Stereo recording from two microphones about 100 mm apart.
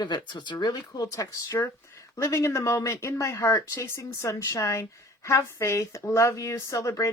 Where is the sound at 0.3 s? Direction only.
50° left (ahead or behind).